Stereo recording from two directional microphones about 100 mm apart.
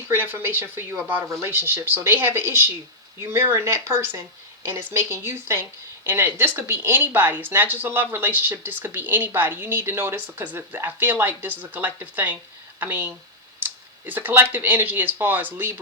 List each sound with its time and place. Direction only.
0.1 s speech: 20° right (ahead or behind)